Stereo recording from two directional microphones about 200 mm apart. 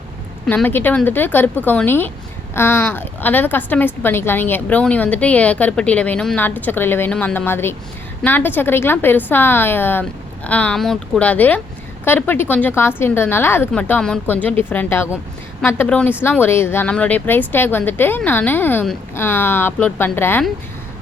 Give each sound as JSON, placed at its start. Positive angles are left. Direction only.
{"t": 0.4, "sound": "a woman's voice", "side_deg": 10}